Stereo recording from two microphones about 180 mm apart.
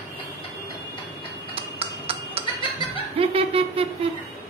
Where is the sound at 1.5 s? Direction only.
30° right (ahead or behind).